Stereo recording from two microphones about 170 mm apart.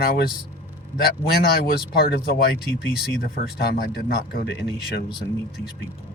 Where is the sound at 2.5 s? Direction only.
5° right (ahead or behind).